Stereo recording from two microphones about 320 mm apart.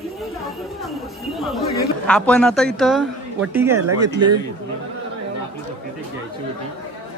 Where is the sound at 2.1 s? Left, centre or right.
Centre.